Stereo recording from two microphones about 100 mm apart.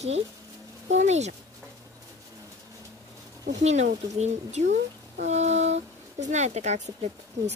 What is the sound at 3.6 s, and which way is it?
Speech, 90° right.